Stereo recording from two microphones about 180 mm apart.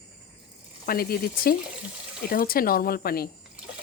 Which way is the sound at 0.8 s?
60° left (ahead or behind).